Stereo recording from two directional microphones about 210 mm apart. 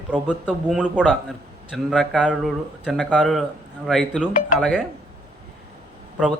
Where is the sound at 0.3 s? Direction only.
5° left (ahead or behind).